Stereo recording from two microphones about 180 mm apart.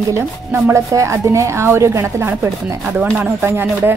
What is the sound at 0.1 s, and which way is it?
Speech, 15° right (ahead or behind).